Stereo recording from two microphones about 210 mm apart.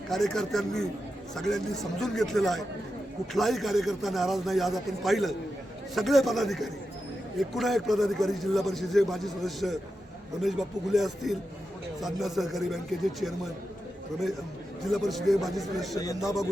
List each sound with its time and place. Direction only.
0.1 s a man's voice: centre (ahead or behind)
14.9 s a man's voice: centre (ahead or behind)
16.0 s speech: 15° left (ahead or behind)